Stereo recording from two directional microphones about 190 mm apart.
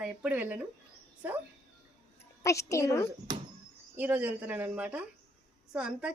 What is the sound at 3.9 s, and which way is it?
Speech, 10° right (ahead or behind).